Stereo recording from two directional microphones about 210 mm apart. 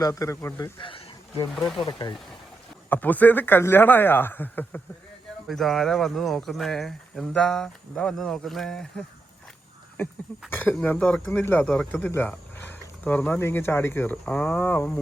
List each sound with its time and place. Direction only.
0.0 s speech: 15° left (ahead or behind)
2.9 s speech: 10° left (ahead or behind)